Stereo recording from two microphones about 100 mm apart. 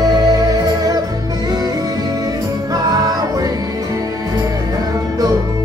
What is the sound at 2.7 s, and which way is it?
Music, 40° right (ahead or behind).